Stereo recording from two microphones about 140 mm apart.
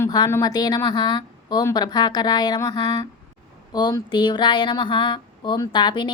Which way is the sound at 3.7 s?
30° left (ahead or behind).